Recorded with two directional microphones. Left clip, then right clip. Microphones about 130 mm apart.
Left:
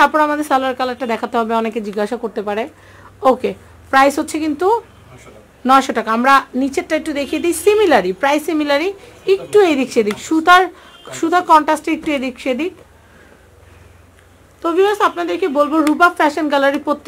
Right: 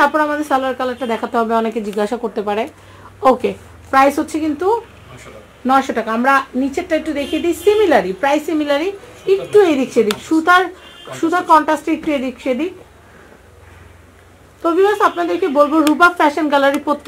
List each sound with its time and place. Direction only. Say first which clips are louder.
0.0 s speech: left 1 dB; 40° left (ahead or behind)
2.0 s speech: right 1 dB; 10° left (ahead or behind)
3.9 s speech: even; 35° left (ahead or behind)
10.3 s speech: left 2 dB; 40° left (ahead or behind)
14.6 s speech: right 1 dB; 35° left (ahead or behind)
16.3 s speech: right 1 dB; 15° left (ahead or behind)